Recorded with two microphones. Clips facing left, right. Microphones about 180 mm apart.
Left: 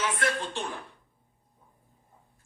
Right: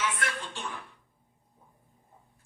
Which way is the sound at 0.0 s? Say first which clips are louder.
Left 4 dB; 35° left (ahead or behind).